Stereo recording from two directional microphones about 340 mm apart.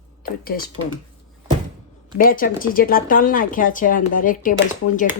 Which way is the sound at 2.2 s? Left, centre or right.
Left.